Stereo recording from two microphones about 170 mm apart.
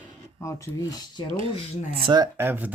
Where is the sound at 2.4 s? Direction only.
10° right (ahead or behind).